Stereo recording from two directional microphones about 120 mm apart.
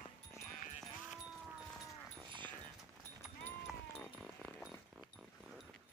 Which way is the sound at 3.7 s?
Centre (ahead or behind).